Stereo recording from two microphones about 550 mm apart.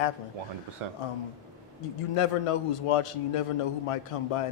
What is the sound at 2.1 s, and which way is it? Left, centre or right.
A man's voice, left.